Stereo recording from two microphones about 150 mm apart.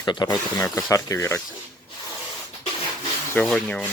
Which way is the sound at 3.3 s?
5° left (ahead or behind).